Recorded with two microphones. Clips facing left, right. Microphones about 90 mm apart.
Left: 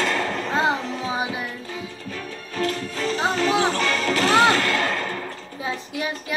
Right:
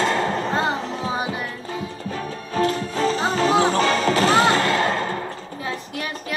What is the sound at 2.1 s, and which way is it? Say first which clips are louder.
Music: right 6 dB; 30° right (ahead or behind).